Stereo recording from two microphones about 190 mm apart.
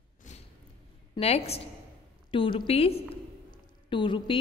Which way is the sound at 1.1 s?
35° left (ahead or behind).